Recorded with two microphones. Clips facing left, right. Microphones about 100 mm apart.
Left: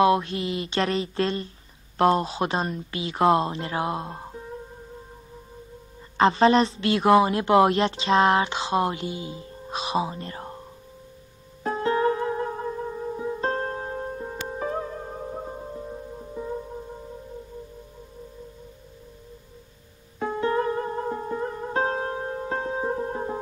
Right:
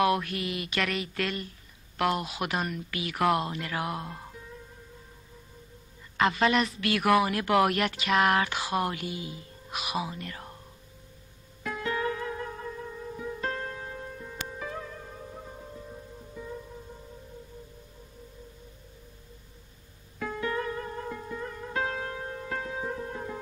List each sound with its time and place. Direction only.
0.0 s speech: 25° left (ahead or behind)
6.1 s speech: 30° left (ahead or behind)
11.6 s music: 35° left (ahead or behind)
20.2 s music: 30° left (ahead or behind)